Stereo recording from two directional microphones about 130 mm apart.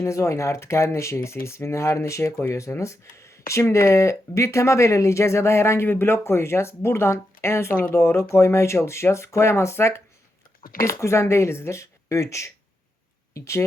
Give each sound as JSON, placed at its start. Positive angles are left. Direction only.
{"t": 0.0, "sound": "speech", "side_deg": 20}